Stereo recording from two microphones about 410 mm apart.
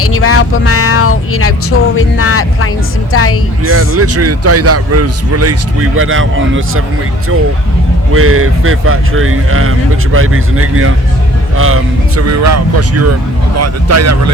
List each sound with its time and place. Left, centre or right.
0.0 s speech: left
3.7 s a man's voice: right
8.1 s a man's voice: right